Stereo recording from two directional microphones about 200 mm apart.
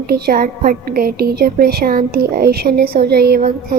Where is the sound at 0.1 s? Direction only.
45° right (ahead or behind).